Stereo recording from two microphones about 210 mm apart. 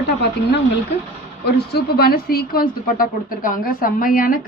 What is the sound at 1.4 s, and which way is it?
A woman's voice, 50° left (ahead or behind).